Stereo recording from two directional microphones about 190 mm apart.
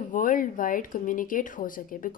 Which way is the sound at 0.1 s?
45° left (ahead or behind).